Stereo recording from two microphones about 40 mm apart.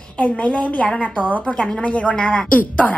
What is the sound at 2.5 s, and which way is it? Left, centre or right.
Speech, left.